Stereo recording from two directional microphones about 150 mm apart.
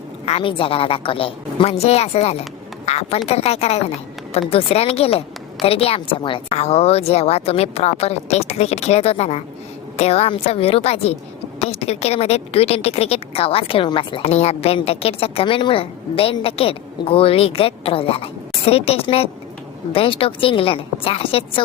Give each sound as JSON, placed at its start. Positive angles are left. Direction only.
{"t": 0.3, "sound": "a woman's voice", "side_deg": 40}